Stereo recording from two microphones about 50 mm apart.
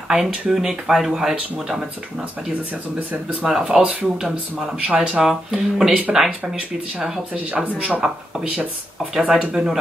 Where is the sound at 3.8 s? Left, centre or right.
Right.